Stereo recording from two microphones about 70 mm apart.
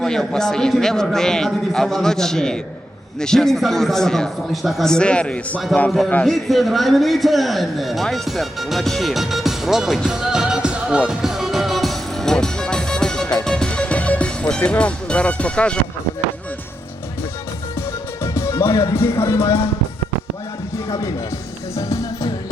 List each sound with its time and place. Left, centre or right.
0.0 s a man's voice: centre
6.2 s a man's voice: centre
11.2 s music: centre
18.2 s music: left
18.9 s speech: left
20.7 s music: left